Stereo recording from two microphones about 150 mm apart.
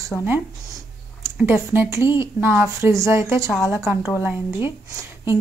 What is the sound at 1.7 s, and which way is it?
A woman's voice, 15° right (ahead or behind).